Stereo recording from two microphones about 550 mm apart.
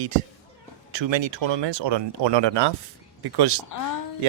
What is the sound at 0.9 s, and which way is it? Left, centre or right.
Speech, right.